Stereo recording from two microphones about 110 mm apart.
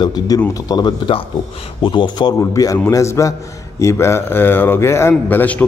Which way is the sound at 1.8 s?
45° left (ahead or behind).